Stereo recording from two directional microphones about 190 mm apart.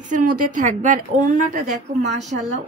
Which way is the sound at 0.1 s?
45° right (ahead or behind).